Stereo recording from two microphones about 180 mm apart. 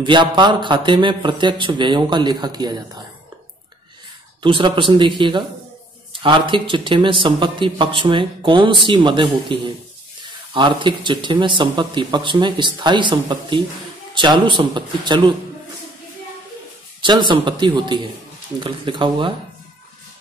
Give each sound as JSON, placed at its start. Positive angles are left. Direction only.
{"t": 0.0, "sound": "speech", "side_deg": -25}
{"t": 4.4, "sound": "speech", "side_deg": -25}
{"t": 17.0, "sound": "speech", "side_deg": -25}